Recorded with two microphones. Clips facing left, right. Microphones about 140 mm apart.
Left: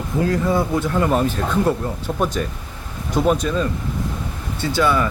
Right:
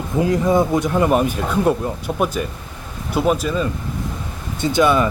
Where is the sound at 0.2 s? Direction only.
15° right (ahead or behind).